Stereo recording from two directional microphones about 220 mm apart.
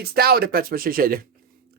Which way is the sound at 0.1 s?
45° right (ahead or behind).